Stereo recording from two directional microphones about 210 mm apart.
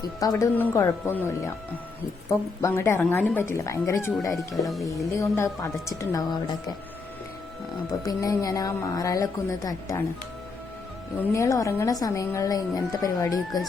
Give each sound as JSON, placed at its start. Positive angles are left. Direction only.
{"t": 0.0, "sound": "a woman's voice", "side_deg": 15}
{"t": 2.6, "sound": "a woman's voice", "side_deg": 10}
{"t": 4.4, "sound": "speech", "side_deg": 0}
{"t": 5.1, "sound": "a woman's voice", "side_deg": 15}
{"t": 8.0, "sound": "a woman's voice", "side_deg": 15}
{"t": 11.3, "sound": "a woman's voice", "side_deg": 15}